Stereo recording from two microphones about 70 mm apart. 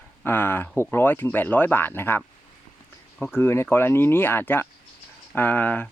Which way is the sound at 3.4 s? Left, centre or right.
Left.